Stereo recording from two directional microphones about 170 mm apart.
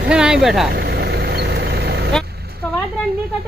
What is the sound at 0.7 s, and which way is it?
Vehicle, 70° right (ahead or behind).